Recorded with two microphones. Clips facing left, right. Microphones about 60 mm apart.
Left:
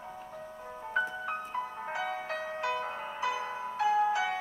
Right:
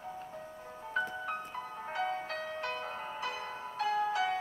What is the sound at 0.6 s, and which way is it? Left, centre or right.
Music, left.